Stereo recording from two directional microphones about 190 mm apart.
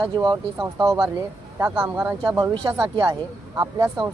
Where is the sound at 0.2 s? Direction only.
20° right (ahead or behind).